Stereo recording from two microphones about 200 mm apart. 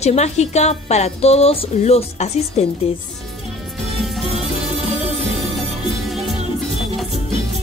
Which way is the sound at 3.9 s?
Centre (ahead or behind).